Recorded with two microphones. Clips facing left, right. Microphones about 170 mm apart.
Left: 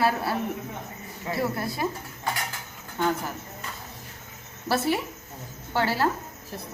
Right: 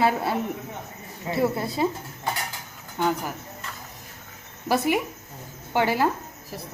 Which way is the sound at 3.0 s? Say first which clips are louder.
Right 1 dB; 10° right (ahead or behind).